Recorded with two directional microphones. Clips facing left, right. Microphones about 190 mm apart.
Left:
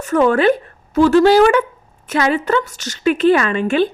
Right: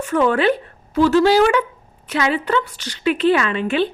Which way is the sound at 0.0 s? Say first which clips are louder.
Left 3 dB; 45° left (ahead or behind).